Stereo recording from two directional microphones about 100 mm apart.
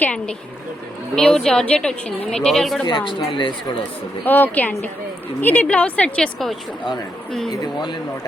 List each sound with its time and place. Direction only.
0.0 s a woman's voice: 10° left (ahead or behind)
2.8 s a woman's voice: 50° left (ahead or behind)
4.3 s a woman's voice: 15° left (ahead or behind)
7.6 s a woman's voice: 50° left (ahead or behind)